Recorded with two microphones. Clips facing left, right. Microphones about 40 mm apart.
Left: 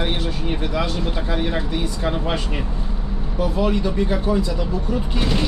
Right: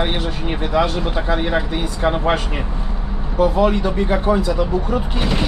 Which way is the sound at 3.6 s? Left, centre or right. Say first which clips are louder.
Right 3 dB; right.